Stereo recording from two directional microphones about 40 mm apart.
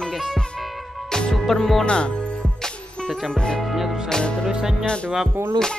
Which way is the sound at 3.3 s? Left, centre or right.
Left.